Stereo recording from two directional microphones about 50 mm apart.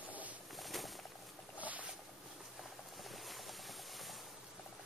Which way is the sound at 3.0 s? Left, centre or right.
Centre.